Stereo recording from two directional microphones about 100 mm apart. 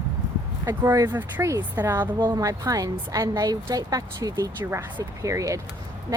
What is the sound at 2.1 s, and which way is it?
Speech, 50° right (ahead or behind).